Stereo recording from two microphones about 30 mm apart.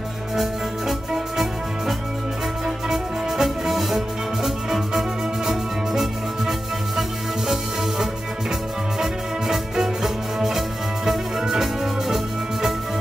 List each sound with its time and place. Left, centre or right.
0.4 s music: centre
9.0 s music: centre